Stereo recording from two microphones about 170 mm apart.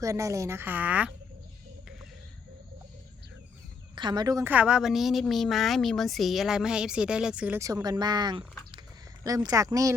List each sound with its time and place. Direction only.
0.0 s a woman's voice: 20° right (ahead or behind)
3.9 s a woman's voice: 25° right (ahead or behind)
4.4 s a woman's voice: 10° right (ahead or behind)
7.6 s speech: 20° right (ahead or behind)